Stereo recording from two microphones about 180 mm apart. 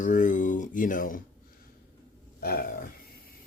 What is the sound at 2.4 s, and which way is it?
Burping, 55° left (ahead or behind).